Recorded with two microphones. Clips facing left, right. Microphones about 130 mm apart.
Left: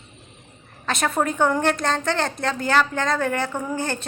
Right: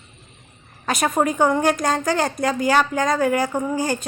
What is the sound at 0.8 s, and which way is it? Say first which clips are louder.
A woman's voice: right 3 dB; 5° right (ahead or behind).